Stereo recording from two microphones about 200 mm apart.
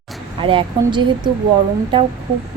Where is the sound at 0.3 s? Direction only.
25° right (ahead or behind).